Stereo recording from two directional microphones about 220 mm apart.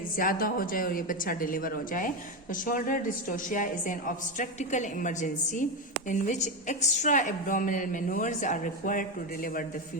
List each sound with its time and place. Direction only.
0.2 s a woman's voice: 40° left (ahead or behind)